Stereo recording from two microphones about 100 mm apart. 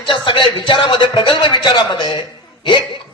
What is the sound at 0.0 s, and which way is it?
A man's voice, 55° left (ahead or behind).